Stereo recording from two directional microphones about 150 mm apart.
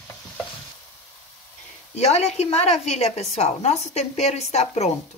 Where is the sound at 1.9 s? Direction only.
45° left (ahead or behind).